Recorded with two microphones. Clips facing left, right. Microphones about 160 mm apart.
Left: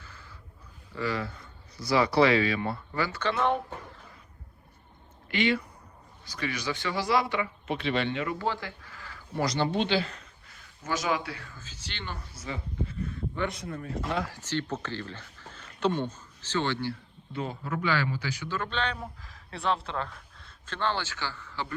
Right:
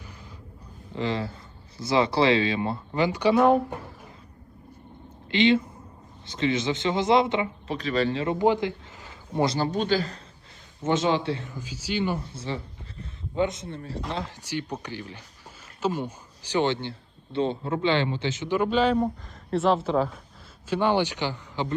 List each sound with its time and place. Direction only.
0.9 s speech: 25° right (ahead or behind)
5.3 s a man's voice: 25° right (ahead or behind)
7.7 s speech: 40° right (ahead or behind)
8.4 s speech: 20° right (ahead or behind)
9.6 s speech: 40° right (ahead or behind)
10.8 s a man's voice: 25° right (ahead or behind); by 12.2 s 10° right (ahead or behind)
12.3 s a sound: 30° right (ahead or behind)
13.1 s a man's voice: 20° right (ahead or behind)
14.3 s a man's voice: 15° right (ahead or behind)